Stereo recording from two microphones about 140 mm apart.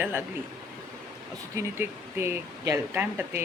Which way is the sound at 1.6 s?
15° right (ahead or behind).